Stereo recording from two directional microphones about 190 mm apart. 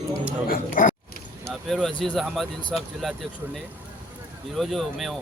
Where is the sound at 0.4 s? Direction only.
50° left (ahead or behind).